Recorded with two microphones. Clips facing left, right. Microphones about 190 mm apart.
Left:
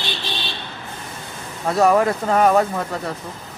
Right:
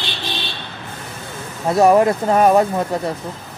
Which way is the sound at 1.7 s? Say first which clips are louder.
Right 3 dB; 15° right (ahead or behind).